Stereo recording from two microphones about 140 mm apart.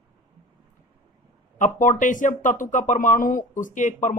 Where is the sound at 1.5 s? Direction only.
65° left (ahead or behind).